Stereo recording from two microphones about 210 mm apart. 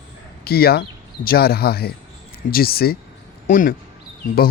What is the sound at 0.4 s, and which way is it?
Speech, 45° left (ahead or behind).